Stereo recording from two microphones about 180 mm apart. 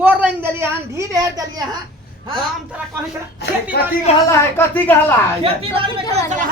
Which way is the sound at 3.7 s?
65° left (ahead or behind).